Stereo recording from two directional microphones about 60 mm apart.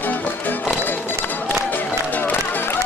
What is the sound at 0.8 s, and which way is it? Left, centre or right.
Run, left.